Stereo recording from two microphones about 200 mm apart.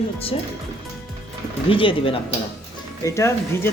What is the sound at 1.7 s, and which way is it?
Speech, 25° left (ahead or behind).